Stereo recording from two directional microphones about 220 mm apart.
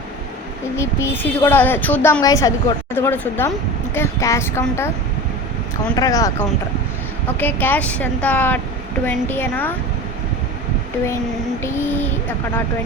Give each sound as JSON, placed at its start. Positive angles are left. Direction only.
{"t": 0.8, "sound": "a woman's voice", "side_deg": 10}
{"t": 6.0, "sound": "a woman's voice", "side_deg": 15}
{"t": 7.3, "sound": "a woman's voice", "side_deg": 10}
{"t": 11.6, "sound": "a woman's voice", "side_deg": 10}